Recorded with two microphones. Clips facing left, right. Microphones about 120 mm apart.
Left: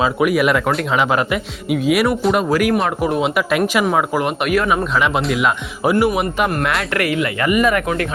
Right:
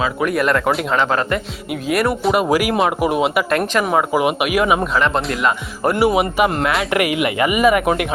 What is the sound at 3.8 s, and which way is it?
Speech, 5° right (ahead or behind).